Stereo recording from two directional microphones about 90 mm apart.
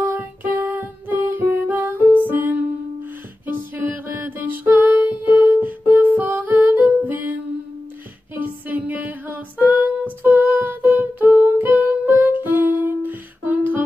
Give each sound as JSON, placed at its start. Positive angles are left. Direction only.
{"t": 0.0, "sound": "music", "side_deg": -25}
{"t": 5.4, "sound": "humming", "side_deg": -20}
{"t": 8.4, "sound": "music", "side_deg": -20}